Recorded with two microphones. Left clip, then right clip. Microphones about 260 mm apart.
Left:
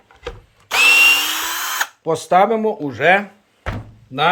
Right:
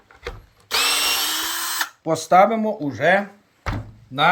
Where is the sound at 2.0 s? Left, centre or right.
Centre.